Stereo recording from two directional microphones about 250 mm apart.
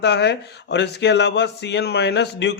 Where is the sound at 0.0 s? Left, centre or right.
Left.